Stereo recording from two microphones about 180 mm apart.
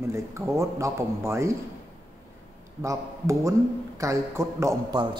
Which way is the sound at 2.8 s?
15° right (ahead or behind).